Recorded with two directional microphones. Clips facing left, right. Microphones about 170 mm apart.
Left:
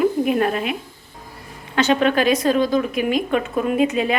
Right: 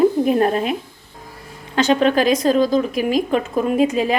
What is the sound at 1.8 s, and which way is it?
Speech, 35° right (ahead or behind).